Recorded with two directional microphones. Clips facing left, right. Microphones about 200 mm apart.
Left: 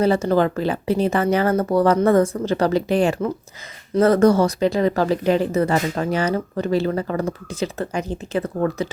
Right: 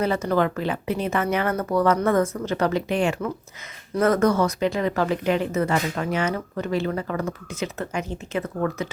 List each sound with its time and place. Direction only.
0.0 s speech: 30° left (ahead or behind)